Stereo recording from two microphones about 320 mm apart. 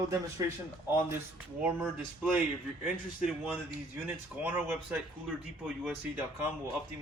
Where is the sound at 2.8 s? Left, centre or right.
Centre.